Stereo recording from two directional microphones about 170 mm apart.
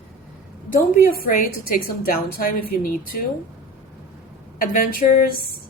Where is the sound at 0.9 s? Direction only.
60° left (ahead or behind).